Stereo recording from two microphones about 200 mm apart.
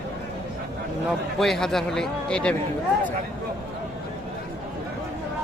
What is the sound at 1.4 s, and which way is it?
Speech, centre (ahead or behind).